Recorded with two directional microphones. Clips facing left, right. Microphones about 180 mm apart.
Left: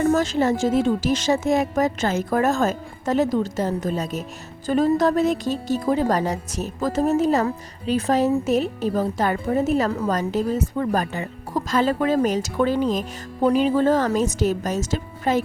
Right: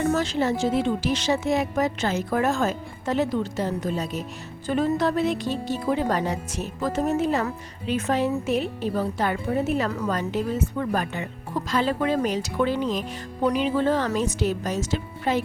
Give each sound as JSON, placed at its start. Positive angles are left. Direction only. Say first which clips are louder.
{"t": 0.1, "sound": "speech", "louder": "left 4 dB", "side_deg": 45}